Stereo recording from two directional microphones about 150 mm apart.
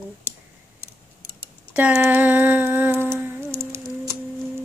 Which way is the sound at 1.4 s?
10° right (ahead or behind).